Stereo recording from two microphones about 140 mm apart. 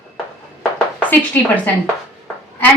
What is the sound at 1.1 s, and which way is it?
Speech, 10° left (ahead or behind).